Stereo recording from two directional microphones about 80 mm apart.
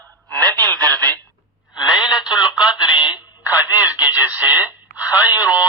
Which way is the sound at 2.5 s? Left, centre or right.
Centre.